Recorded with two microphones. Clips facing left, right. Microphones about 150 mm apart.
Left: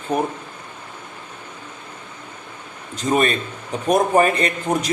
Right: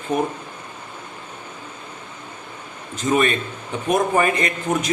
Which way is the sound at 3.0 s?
35° left (ahead or behind).